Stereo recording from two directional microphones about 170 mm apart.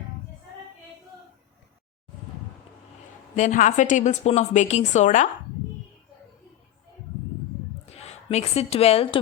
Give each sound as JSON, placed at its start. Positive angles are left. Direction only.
{"t": 3.3, "sound": "a woman's voice", "side_deg": 45}
{"t": 7.9, "sound": "speech", "side_deg": 40}